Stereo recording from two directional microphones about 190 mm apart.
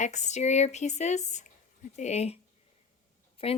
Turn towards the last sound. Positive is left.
turn(degrees=30)  # may be behind; listen again after turning